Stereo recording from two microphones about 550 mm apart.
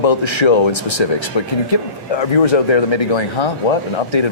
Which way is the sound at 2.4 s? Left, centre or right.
Left.